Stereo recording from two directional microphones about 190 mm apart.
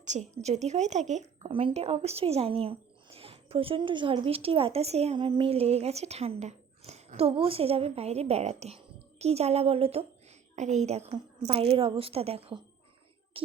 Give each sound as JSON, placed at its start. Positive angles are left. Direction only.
{"t": 0.0, "sound": "a woman's voice", "side_deg": -40}